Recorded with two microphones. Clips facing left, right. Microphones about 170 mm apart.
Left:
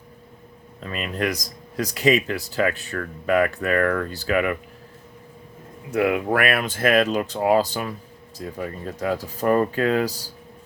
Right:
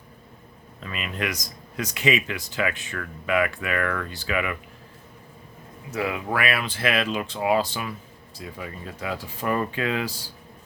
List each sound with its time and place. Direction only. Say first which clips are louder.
0.8 s speech: left 4 dB; 40° left (ahead or behind)
5.9 s speech: left 6 dB; 55° left (ahead or behind); by 10.3 s 40° left (ahead or behind)